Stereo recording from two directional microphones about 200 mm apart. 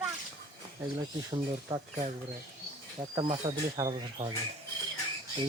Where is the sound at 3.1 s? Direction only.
25° right (ahead or behind).